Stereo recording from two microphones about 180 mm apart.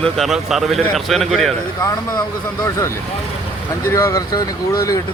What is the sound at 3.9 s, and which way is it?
Speech, 15° left (ahead or behind).